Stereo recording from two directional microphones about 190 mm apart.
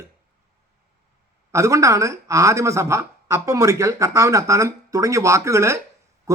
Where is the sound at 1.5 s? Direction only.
15° right (ahead or behind).